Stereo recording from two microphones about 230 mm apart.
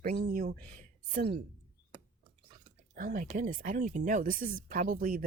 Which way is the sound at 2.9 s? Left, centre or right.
Right.